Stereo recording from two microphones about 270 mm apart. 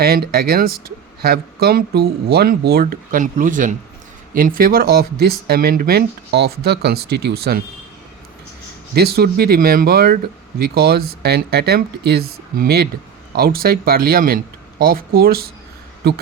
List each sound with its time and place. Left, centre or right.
0.0 s speech: right
9.0 s speech: right